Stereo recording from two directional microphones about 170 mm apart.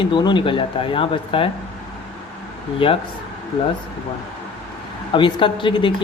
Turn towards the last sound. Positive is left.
turn(degrees=30)  # may be behind; listen again after turning